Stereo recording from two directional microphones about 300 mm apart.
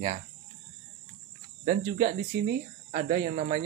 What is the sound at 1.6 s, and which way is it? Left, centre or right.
Speech, right.